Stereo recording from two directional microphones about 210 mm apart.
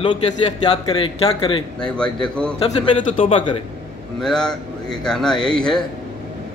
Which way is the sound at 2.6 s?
25° left (ahead or behind).